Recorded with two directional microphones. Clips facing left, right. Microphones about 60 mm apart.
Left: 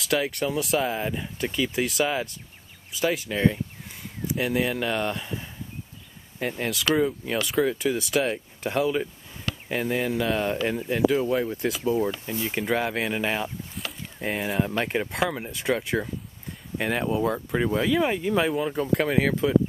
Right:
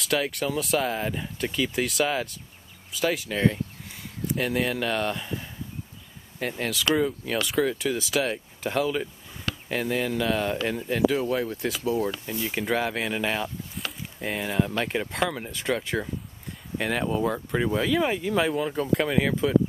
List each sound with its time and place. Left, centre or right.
0.0 s speech: centre
12.1 s speech: left
12.4 s speech: centre